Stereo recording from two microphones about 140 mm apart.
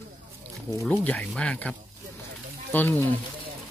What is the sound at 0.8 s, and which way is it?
Speech, 10° left (ahead or behind).